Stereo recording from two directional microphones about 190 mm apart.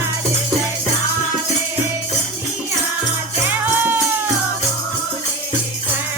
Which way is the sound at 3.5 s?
10° right (ahead or behind).